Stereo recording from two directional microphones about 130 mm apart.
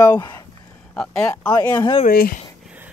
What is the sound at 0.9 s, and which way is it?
Speech, 5° left (ahead or behind).